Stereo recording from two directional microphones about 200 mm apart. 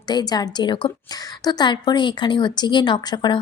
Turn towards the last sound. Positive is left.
turn(degrees=20)  # may be behind; listen again after turning